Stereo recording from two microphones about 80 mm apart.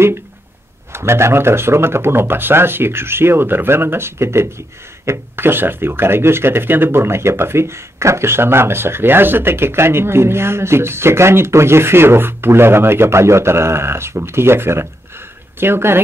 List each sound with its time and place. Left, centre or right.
0.9 s speech: right